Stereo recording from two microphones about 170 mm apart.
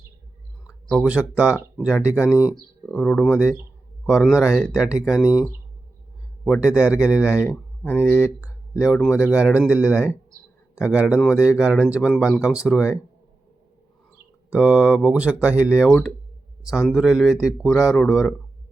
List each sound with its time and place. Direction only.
0.9 s speech: 5° right (ahead or behind)
2.9 s speech: 10° left (ahead or behind)
3.2 s speech: 5° right (ahead or behind)
6.4 s speech: 5° right (ahead or behind)
7.4 s speech: 15° left (ahead or behind)
7.9 s speech: 5° right (ahead or behind)
14.5 s speech: 5° right (ahead or behind)
16.9 s speech: 5° right (ahead or behind)